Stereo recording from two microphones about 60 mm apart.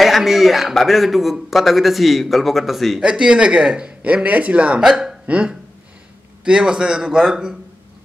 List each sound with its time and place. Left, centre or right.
0.0 s a man's voice: centre
3.0 s speech: centre
4.8 s speech: centre
5.2 s a man's voice: right